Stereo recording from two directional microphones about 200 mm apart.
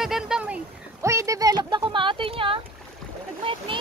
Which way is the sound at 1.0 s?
15° right (ahead or behind).